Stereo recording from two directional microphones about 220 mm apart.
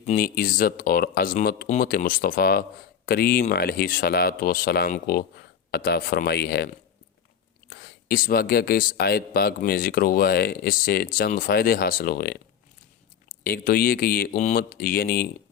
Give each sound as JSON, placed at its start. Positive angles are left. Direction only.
{"t": 0.2, "sound": "speech", "side_deg": 40}
{"t": 7.7, "sound": "speech", "side_deg": 45}
{"t": 13.4, "sound": "speech", "side_deg": 45}